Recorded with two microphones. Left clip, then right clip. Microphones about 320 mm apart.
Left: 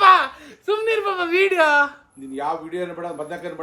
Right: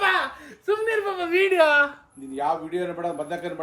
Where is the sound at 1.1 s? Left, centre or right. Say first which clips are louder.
Left 1 dB; left.